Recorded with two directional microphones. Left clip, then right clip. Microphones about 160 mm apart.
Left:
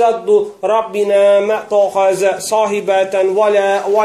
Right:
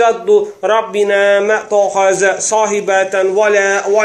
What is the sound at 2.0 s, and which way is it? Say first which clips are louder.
A man's voice: right 1 dB; 15° left (ahead or behind).